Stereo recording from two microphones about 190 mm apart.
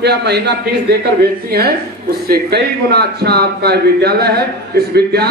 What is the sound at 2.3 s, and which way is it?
Speech, 55° right (ahead or behind).